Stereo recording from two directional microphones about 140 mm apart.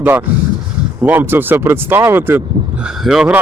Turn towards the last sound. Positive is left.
turn(degrees=-5)  # may be behind; listen again after turning